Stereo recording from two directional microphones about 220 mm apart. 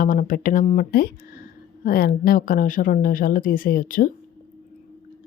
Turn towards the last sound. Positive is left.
turn(degrees=40)  # may be behind; listen again after turning